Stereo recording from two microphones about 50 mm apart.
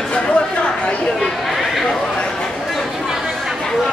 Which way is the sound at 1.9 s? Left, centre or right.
Centre.